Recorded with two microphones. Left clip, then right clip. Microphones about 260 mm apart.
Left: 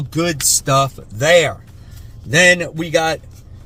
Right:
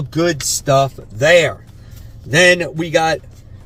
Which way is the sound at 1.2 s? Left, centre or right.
Centre.